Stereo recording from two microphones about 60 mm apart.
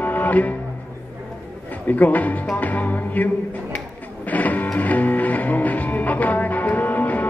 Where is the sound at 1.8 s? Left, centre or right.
Left.